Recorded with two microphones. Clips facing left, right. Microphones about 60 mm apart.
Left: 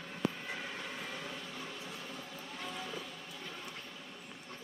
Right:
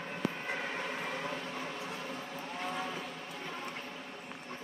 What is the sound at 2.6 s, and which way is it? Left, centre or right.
Vehicle, right.